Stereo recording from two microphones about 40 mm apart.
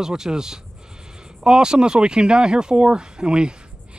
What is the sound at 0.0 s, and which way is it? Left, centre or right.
Speech, centre.